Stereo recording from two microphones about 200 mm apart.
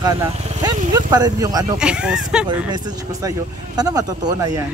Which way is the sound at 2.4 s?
20° right (ahead or behind).